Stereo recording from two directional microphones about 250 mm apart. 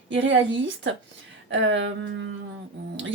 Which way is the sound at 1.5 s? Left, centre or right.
Right.